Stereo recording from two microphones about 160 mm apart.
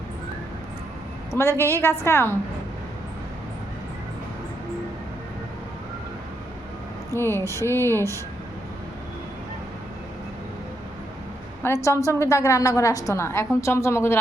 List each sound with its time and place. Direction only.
1.3 s speech: 15° left (ahead or behind)
7.1 s speech: 15° left (ahead or behind)
11.6 s a woman's voice: 20° left (ahead or behind)